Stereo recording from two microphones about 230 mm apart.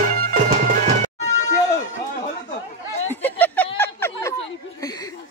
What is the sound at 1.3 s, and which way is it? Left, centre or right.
Music, left.